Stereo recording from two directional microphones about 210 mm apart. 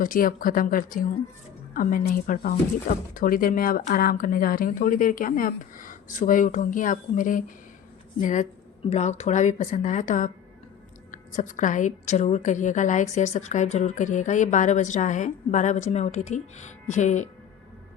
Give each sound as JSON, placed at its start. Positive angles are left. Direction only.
{"t": 0.0, "sound": "a woman's voice", "side_deg": 40}